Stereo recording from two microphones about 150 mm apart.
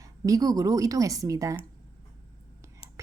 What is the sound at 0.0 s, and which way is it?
A woman's voice, 25° right (ahead or behind).